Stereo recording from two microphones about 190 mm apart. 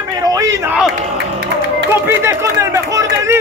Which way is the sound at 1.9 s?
10° right (ahead or behind).